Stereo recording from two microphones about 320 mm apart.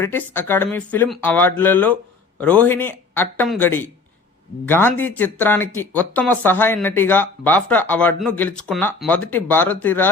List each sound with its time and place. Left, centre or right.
0.0 s speech: centre